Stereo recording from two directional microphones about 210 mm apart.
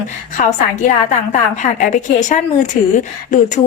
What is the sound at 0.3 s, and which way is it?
A woman's voice, 35° left (ahead or behind).